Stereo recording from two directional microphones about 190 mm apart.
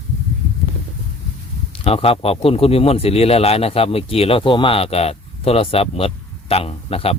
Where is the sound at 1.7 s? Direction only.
30° left (ahead or behind).